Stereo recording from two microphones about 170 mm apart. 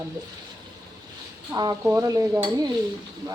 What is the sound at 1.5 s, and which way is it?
Speech, 20° right (ahead or behind).